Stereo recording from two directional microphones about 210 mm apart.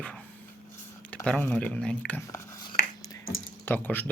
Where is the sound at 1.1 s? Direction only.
5° left (ahead or behind).